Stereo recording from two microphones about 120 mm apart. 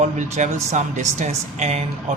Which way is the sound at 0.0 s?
85° right.